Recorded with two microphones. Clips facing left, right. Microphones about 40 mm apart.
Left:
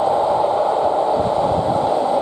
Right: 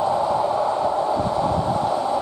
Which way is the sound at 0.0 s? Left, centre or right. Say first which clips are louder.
Left 4 dB; left.